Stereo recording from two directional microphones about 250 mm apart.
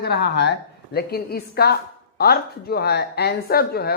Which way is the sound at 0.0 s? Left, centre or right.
Left.